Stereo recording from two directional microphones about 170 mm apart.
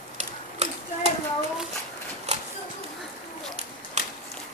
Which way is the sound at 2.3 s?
40° right (ahead or behind).